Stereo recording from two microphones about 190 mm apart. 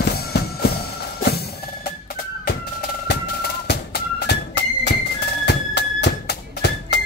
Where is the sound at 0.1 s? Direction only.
55° left (ahead or behind).